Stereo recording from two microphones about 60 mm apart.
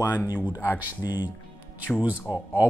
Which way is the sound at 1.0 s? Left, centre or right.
Left.